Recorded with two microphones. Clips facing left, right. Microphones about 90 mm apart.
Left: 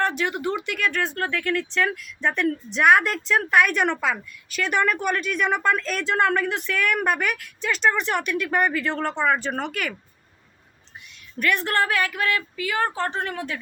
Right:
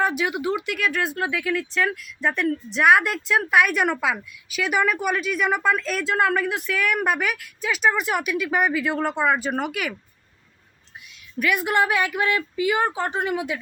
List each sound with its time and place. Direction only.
0.0 s speech: 5° right (ahead or behind)
11.3 s a woman's voice: 10° right (ahead or behind)